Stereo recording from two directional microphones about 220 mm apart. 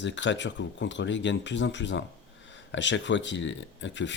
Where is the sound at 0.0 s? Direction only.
55° left (ahead or behind).